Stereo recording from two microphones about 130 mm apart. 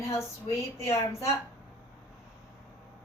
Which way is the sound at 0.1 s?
20° left (ahead or behind).